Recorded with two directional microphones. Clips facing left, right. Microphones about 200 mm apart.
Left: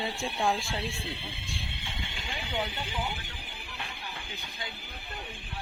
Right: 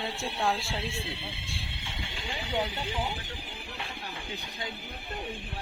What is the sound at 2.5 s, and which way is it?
Speech, 30° right (ahead or behind).